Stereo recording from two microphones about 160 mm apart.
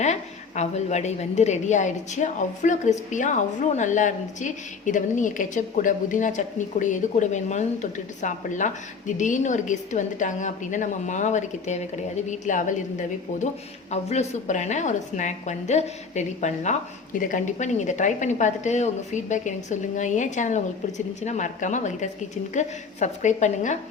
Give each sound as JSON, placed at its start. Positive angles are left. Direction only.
{"t": 0.0, "sound": "a woman's voice", "side_deg": 45}